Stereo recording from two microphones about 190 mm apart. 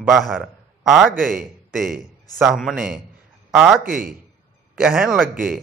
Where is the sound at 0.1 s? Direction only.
Centre (ahead or behind).